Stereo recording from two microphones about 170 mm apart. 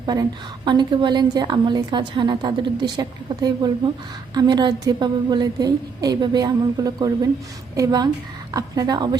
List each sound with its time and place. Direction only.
0.0 s a woman's voice: 25° right (ahead or behind)